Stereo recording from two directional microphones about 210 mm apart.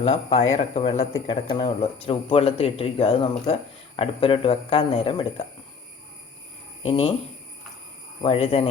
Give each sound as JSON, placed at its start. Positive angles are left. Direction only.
{"t": 0.0, "sound": "speech", "side_deg": 30}
{"t": 6.8, "sound": "speech", "side_deg": 25}
{"t": 8.2, "sound": "speech", "side_deg": 30}